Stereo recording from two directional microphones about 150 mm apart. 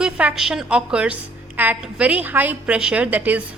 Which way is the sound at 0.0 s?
5° right (ahead or behind).